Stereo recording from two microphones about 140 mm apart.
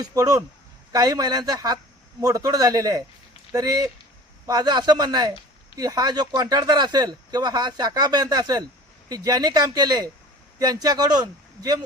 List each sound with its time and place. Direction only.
0.0 s speech: 25° right (ahead or behind)